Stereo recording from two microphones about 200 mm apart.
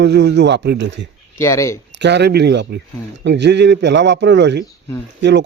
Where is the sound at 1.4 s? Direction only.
15° left (ahead or behind).